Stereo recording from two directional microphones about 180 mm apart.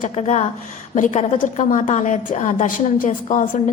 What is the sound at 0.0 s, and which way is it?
A woman's voice, 40° left (ahead or behind).